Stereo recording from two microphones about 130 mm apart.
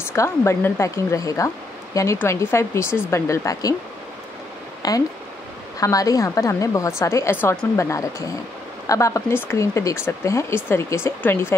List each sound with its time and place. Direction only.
0.1 s speech: 20° left (ahead or behind)
4.8 s speech: 30° left (ahead or behind)